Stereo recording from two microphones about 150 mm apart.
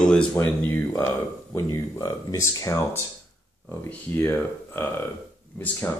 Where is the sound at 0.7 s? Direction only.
20° left (ahead or behind).